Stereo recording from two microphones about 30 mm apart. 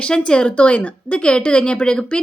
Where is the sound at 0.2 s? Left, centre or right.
Left.